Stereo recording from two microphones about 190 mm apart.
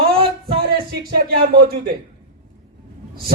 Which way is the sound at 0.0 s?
30° right (ahead or behind).